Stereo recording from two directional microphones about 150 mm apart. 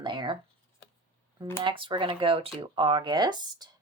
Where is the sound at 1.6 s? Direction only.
35° right (ahead or behind).